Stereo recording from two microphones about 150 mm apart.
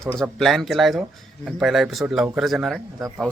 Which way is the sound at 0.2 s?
Centre (ahead or behind).